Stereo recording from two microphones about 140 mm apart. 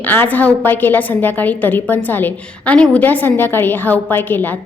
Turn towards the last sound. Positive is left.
turn(degrees=15)  # may be behind; listen again after turning